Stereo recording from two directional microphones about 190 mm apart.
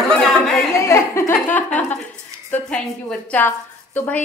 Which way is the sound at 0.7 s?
15° left (ahead or behind).